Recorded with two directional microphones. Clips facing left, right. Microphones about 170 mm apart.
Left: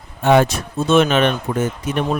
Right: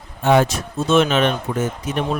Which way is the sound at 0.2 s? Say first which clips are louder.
Left 2 dB; 60° left (ahead or behind).